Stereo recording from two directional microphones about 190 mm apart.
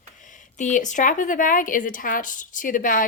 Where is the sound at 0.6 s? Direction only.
40° left (ahead or behind).